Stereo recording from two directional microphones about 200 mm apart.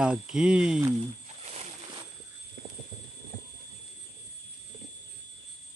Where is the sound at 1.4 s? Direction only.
30° right (ahead or behind).